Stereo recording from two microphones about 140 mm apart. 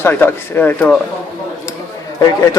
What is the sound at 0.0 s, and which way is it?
Speech, 15° left (ahead or behind).